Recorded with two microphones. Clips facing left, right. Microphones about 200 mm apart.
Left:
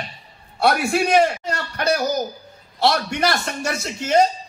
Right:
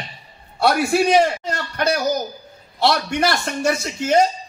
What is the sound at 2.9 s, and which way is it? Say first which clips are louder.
A woman's voice: right 1 dB; 55° right (ahead or behind).